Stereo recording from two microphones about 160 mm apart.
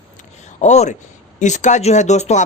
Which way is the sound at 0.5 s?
45° left (ahead or behind).